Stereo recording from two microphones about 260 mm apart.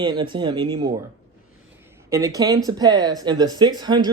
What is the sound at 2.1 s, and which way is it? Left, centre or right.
Speech, centre.